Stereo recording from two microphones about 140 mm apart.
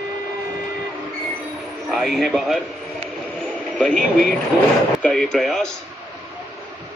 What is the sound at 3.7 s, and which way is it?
Speech, 5° left (ahead or behind).